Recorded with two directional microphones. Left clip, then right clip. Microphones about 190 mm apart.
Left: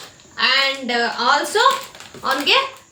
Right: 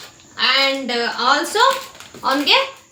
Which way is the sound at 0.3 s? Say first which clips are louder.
Right 1 dB; 10° right (ahead or behind).